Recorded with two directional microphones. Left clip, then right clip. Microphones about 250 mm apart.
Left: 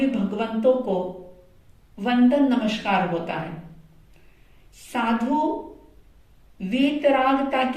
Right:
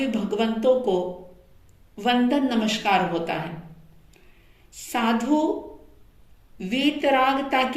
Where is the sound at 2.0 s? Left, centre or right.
Right.